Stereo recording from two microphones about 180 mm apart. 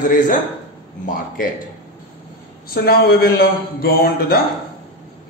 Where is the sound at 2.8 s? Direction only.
60° left (ahead or behind).